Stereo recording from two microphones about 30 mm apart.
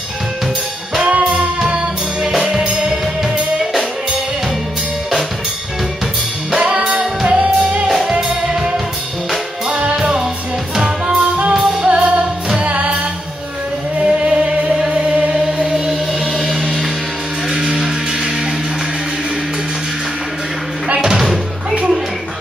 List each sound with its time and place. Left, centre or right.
1.0 s music: right
1.6 s music: right
2.3 s music: centre
2.6 s music: right
6.7 s music: right
7.2 s music: right
8.2 s music: centre
9.7 s music: right
10.7 s music: centre
11.9 s music: right
13.9 s music: right
16.3 s music: centre
21.0 s music: centre